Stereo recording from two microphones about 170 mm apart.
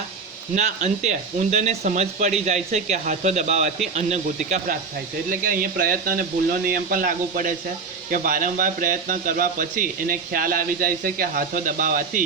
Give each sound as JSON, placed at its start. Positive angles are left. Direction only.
{"t": 0.5, "sound": "speech", "side_deg": -40}